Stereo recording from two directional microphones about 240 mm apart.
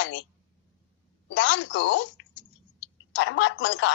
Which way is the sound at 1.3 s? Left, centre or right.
Left.